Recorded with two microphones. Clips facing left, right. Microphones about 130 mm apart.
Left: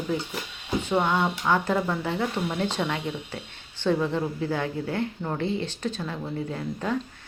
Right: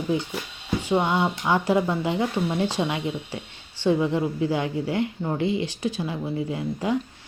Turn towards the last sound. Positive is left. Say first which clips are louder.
# right 3 dB
turn(degrees=-15)  # may be behind; listen again after turning